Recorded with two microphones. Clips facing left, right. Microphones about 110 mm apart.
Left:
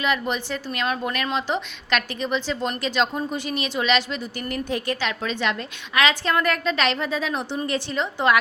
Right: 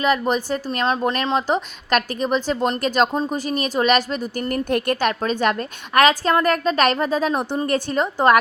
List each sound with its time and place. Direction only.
0.0 s a woman's voice: 40° right (ahead or behind)
1.4 s a woman's voice: 40° right (ahead or behind)